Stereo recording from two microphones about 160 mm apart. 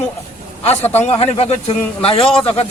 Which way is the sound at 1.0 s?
40° left (ahead or behind).